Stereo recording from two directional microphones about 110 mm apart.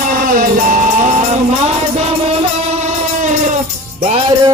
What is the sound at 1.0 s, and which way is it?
Music, 90° right.